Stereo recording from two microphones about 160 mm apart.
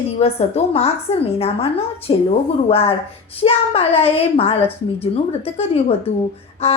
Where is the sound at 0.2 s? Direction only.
40° left (ahead or behind).